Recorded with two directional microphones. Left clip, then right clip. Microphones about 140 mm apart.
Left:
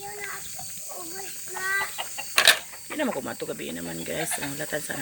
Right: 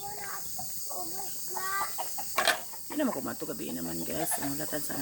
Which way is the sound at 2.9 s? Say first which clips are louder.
Left 3 dB; 35° left (ahead or behind).